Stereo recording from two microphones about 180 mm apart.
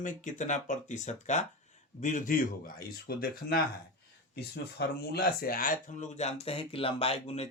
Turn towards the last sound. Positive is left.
turn(degrees=35)  # may be behind; listen again after turning